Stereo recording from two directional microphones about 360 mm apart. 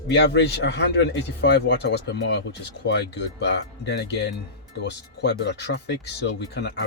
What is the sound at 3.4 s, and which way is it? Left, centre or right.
Speech, left.